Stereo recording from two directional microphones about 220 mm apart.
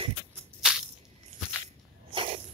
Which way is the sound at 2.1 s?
25° right (ahead or behind).